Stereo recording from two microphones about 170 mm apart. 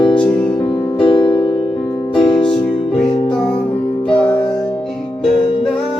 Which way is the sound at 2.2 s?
30° left (ahead or behind).